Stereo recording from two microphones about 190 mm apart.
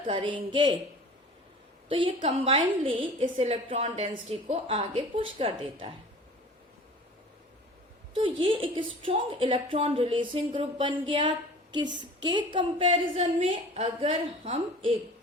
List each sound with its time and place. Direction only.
0.1 s a woman's voice: 25° right (ahead or behind)
1.9 s a woman's voice: 25° right (ahead or behind)
8.1 s a woman's voice: 25° right (ahead or behind)